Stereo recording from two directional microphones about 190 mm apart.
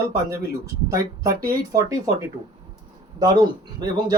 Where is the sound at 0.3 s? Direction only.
20° right (ahead or behind).